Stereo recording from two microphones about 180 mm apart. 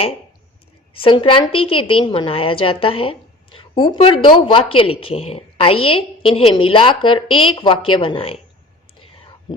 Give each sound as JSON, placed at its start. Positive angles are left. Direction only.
{"t": 0.9, "sound": "a woman's voice", "side_deg": 30}